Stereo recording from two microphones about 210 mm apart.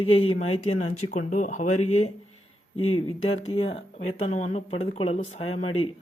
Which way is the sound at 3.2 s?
30° left (ahead or behind).